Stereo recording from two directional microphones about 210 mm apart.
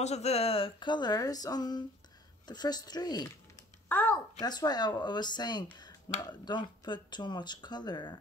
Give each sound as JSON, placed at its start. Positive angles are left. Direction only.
{"t": 0.0, "sound": "a child's voice", "side_deg": 30}
{"t": 4.5, "sound": "speech", "side_deg": 20}